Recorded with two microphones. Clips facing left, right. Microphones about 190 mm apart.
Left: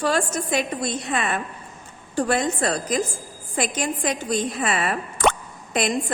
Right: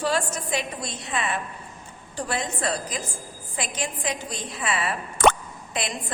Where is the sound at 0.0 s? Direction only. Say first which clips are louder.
Left 3 dB; 50° left (ahead or behind).